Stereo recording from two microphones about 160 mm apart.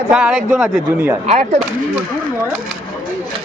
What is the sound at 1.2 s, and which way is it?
Speech, 45° right (ahead or behind).